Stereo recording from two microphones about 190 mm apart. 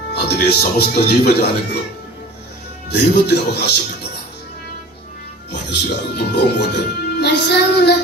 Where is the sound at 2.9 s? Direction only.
65° left (ahead or behind).